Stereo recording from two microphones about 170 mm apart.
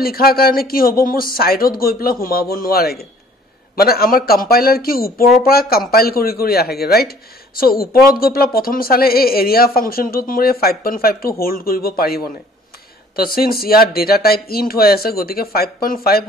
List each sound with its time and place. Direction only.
0.0 s a man's voice: 60° left (ahead or behind)